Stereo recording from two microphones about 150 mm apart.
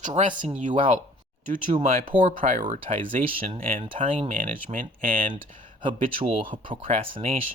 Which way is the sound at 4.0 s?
50° right (ahead or behind).